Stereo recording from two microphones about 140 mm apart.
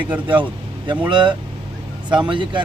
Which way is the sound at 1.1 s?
35° right (ahead or behind).